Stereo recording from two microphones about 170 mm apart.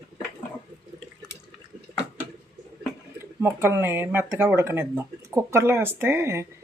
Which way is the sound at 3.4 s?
15° right (ahead or behind).